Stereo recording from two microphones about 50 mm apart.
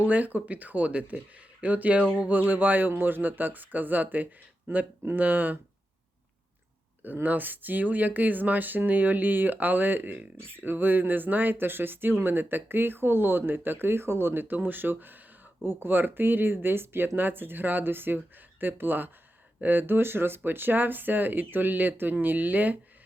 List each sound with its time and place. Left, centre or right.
0.0 s speech: right
7.0 s speech: right